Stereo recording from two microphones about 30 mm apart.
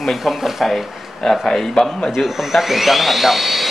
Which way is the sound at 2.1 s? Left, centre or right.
Centre.